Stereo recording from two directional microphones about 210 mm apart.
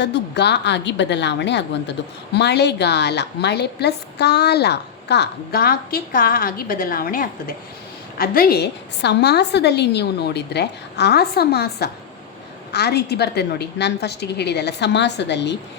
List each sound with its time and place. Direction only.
0.0 s a woman's voice: 55° left (ahead or behind)